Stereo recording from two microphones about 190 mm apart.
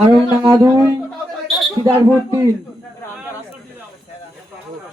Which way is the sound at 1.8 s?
20° right (ahead or behind).